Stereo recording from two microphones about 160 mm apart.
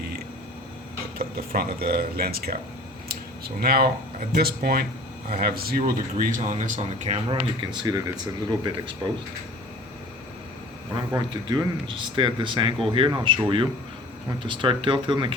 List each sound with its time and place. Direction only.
1.4 s speech: 70° right (ahead or behind)
3.1 s a sound: 70° right (ahead or behind)
4.4 s speech: 70° right (ahead or behind); by 7.2 s 45° right (ahead or behind)
7.3 s speech: 30° right (ahead or behind)
11.1 s speech: 25° right (ahead or behind)